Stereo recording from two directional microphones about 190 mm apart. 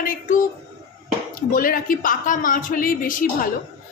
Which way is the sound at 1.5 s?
45° left (ahead or behind).